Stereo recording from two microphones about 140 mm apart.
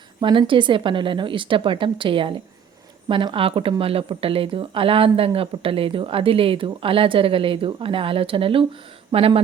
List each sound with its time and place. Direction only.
0.2 s speech: 35° right (ahead or behind)